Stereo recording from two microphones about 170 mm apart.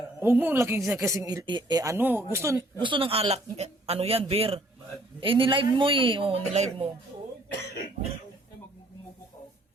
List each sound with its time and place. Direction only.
0.2 s a woman's voice: 10° right (ahead or behind)
2.8 s speech: 30° right (ahead or behind)